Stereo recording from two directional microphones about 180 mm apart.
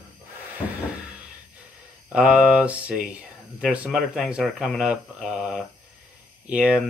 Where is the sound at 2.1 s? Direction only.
5° right (ahead or behind).